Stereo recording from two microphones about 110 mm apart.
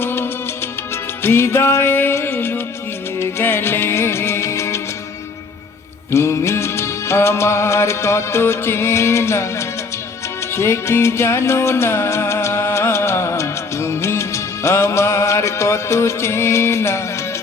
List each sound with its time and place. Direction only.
0.0 s music: 20° left (ahead or behind)
6.1 s music: 25° left (ahead or behind)